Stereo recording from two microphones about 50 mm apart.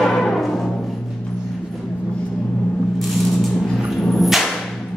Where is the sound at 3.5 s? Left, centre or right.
Centre.